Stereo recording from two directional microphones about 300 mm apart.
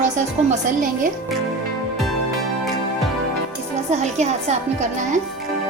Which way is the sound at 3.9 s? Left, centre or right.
Right.